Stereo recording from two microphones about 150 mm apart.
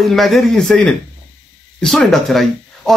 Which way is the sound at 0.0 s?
Centre (ahead or behind).